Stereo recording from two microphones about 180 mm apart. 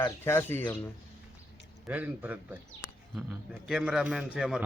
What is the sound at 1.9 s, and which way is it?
A man's voice, 10° right (ahead or behind).